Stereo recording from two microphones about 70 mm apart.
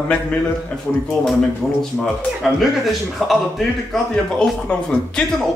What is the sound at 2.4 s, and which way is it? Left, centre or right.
A man's voice, centre.